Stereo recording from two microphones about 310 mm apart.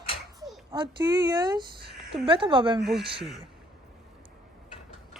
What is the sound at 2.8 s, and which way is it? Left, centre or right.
Speech, centre.